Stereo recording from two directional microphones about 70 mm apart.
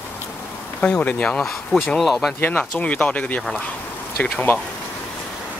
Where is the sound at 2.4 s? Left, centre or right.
Left.